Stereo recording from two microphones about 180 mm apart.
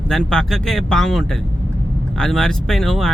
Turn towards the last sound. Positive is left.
turn(degrees=0)  # may be behind; listen again after turning